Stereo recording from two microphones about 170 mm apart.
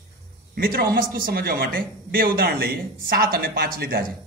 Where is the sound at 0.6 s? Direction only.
65° right (ahead or behind).